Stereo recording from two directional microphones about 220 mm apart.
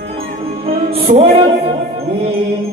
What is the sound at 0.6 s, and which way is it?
Music, 25° right (ahead or behind).